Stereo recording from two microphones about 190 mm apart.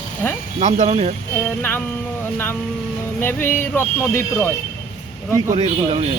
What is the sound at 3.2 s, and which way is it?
Speech, 10° left (ahead or behind).